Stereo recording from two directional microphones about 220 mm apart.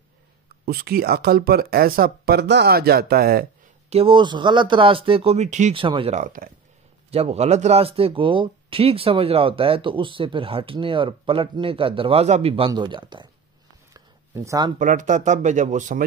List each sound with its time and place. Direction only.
0.7 s speech: 45° right (ahead or behind)
3.9 s speech: 25° right (ahead or behind)
13.9 s a sound: 15° right (ahead or behind)
14.8 s speech: 35° right (ahead or behind)